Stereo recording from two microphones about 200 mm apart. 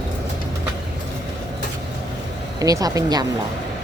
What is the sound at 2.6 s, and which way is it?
Speech, 15° right (ahead or behind).